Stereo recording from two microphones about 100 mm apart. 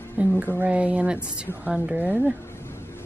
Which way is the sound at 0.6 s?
15° right (ahead or behind).